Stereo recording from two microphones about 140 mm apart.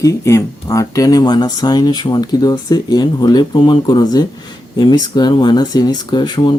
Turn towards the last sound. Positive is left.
turn(degrees=35)  # may be behind; listen again after turning